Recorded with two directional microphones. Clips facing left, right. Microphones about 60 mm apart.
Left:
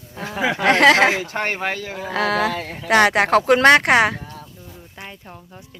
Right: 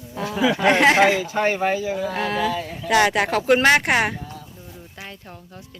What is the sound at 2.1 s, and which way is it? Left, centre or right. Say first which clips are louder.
Speech: left 7 dB; left.